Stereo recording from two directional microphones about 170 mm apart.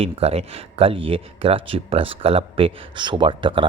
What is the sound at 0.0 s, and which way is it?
Speech, 35° right (ahead or behind).